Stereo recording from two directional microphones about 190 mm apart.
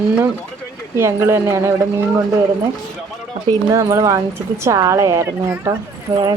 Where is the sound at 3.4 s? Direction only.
15° right (ahead or behind).